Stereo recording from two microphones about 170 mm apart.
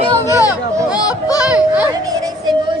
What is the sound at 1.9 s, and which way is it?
Music, 20° right (ahead or behind).